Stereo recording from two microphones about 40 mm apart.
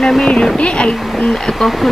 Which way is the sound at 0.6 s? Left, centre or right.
Left.